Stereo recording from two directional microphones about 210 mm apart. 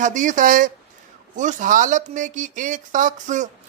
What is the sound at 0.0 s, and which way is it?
Speech, 35° right (ahead or behind).